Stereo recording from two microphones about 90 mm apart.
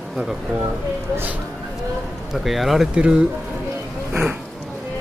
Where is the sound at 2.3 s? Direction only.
Centre (ahead or behind).